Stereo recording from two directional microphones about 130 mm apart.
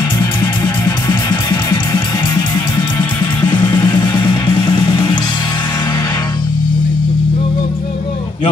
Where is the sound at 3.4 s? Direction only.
30° left (ahead or behind).